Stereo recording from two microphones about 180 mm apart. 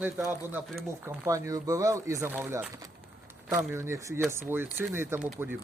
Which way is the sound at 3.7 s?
15° right (ahead or behind).